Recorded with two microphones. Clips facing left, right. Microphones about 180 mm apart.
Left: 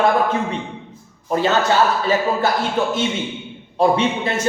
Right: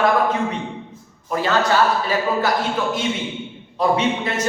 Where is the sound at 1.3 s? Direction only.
25° left (ahead or behind).